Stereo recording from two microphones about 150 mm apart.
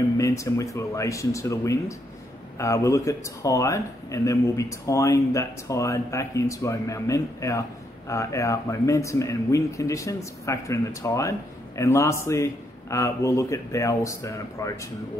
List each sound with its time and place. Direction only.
0.2 s speech: 20° left (ahead or behind)